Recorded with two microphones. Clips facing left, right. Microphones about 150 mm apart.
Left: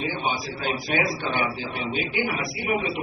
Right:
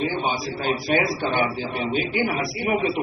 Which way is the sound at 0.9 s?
40° right (ahead or behind).